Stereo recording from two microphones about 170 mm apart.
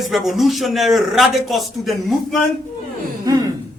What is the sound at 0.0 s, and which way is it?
Speech, centre (ahead or behind).